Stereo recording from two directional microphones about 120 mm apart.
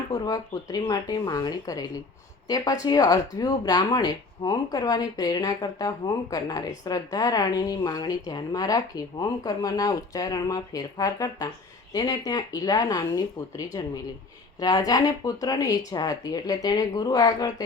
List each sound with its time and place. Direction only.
0.1 s a woman's voice: 30° left (ahead or behind)